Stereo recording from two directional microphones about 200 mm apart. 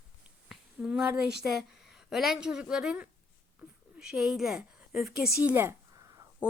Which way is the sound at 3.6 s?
5° right (ahead or behind).